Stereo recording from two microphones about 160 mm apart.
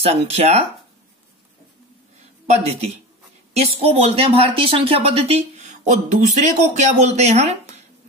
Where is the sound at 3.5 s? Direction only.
40° right (ahead or behind).